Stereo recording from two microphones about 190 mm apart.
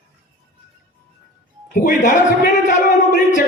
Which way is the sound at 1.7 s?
45° left (ahead or behind).